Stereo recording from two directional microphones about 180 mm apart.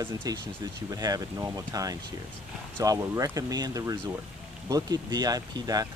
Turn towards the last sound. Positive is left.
turn(degrees=-20)  # may be behind; listen again after turning